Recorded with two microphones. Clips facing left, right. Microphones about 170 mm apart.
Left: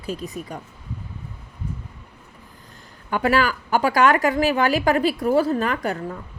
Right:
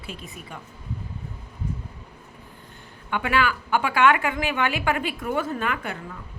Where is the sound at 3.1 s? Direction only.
40° left (ahead or behind).